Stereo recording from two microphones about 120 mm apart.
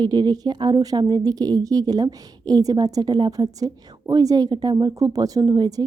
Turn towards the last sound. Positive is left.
turn(degrees=-30)  # may be behind; listen again after turning